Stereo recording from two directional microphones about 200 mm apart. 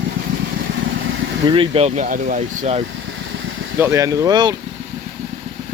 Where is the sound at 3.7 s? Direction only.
15° right (ahead or behind).